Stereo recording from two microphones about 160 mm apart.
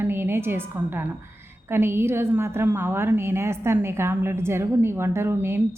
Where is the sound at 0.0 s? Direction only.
15° right (ahead or behind).